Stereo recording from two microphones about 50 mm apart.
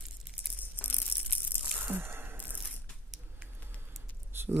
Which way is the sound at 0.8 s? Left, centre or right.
Left.